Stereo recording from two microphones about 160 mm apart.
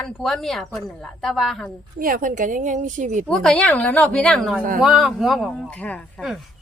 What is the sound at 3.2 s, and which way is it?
A woman's voice, 5° left (ahead or behind).